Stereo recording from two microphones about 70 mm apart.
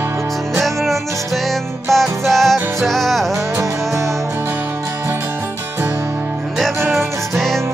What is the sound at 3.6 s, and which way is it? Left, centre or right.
Music, right.